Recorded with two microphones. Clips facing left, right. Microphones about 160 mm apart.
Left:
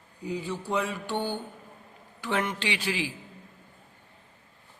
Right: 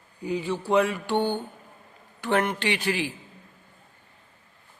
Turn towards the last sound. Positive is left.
turn(degrees=-55)  # may be behind; listen again after turning